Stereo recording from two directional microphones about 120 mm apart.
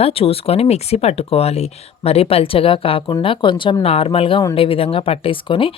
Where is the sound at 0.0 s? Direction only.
50° left (ahead or behind).